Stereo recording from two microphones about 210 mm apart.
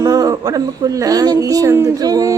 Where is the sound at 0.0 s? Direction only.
15° right (ahead or behind).